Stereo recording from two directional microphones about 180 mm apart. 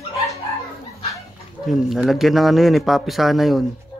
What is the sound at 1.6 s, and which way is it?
A man's voice, centre (ahead or behind).